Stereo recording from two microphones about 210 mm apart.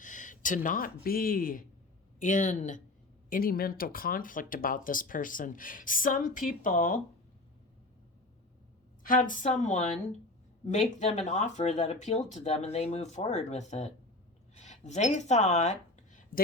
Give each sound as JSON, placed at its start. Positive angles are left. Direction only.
{"t": 0.0, "sound": "speech", "side_deg": 40}
{"t": 9.0, "sound": "speech", "side_deg": 40}
{"t": 16.3, "sound": "speech", "side_deg": 45}